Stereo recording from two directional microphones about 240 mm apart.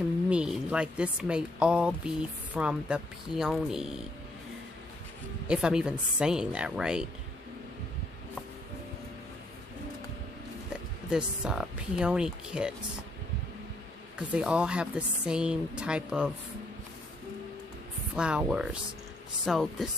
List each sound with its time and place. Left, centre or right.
0.3 s speech: centre
5.5 s speech: centre
11.1 s speech: centre
14.1 s speech: centre
18.1 s speech: centre